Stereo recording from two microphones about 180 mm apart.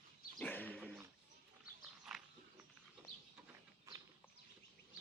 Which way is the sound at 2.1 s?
Centre (ahead or behind).